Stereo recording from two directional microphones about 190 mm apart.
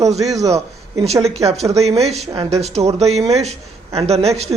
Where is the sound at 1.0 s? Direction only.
35° right (ahead or behind).